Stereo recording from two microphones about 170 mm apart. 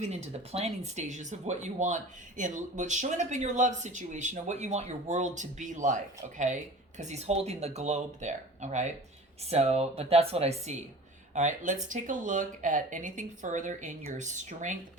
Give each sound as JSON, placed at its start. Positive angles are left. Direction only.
{"t": 0.0, "sound": "speech", "side_deg": -40}